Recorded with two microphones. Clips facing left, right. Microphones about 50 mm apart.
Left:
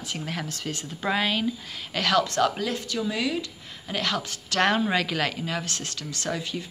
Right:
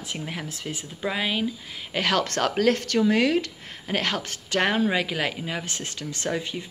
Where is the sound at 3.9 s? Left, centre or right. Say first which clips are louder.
Right 1 dB; right.